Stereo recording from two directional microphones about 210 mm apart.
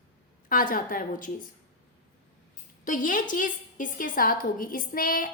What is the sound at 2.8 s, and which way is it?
A woman's voice, 40° left (ahead or behind).